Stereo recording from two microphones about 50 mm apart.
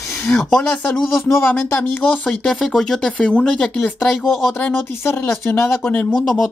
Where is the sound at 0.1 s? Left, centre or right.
Left.